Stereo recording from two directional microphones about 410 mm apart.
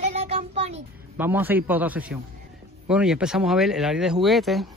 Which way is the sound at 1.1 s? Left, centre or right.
Centre.